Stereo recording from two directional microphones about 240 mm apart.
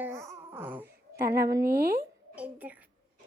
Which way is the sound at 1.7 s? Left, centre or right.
Right.